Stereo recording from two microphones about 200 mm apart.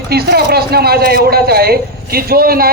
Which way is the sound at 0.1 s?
55° right (ahead or behind).